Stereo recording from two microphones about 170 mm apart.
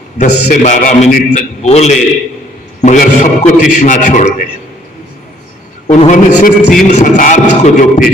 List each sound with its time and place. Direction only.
0.2 s a man's voice: 45° left (ahead or behind)
5.9 s a man's voice: 50° left (ahead or behind)